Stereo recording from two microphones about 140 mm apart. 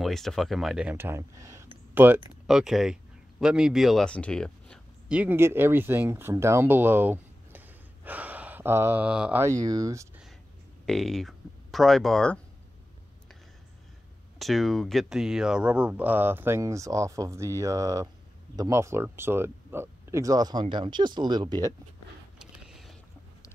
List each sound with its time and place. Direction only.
0.0 s speech: centre (ahead or behind); by 2.2 s 15° right (ahead or behind)
2.4 s speech: centre (ahead or behind)
5.0 s speech: 10° right (ahead or behind)
9.4 s speech: 25° right (ahead or behind)
10.9 s speech: centre (ahead or behind)
14.4 s speech: centre (ahead or behind); by 21.7 s 30° right (ahead or behind)
22.4 s vehicle: 5° right (ahead or behind)